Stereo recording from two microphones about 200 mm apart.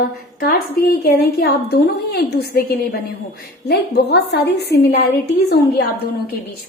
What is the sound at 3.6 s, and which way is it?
A woman's voice, 55° left (ahead or behind).